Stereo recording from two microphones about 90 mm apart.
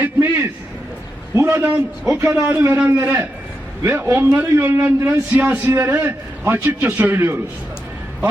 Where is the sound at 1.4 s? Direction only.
25° right (ahead or behind).